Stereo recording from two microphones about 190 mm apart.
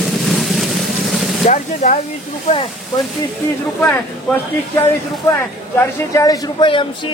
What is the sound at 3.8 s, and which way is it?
Speech, 10° left (ahead or behind).